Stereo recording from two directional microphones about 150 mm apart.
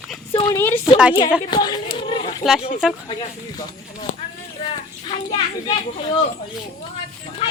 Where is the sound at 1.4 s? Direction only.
30° left (ahead or behind).